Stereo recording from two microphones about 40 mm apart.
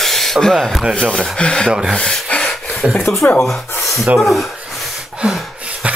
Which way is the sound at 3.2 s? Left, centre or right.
Left.